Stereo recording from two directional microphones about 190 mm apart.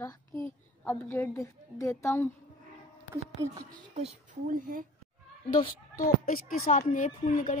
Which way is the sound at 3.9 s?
35° right (ahead or behind).